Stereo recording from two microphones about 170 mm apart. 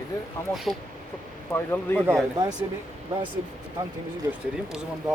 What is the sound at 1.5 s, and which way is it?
Speech, 15° left (ahead or behind).